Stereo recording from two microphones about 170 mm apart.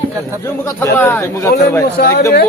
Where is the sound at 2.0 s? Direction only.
65° left (ahead or behind).